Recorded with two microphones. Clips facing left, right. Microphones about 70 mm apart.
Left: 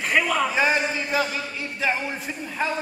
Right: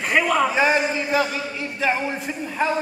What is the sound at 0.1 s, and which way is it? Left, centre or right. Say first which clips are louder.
A man's voice: right 3 dB; centre.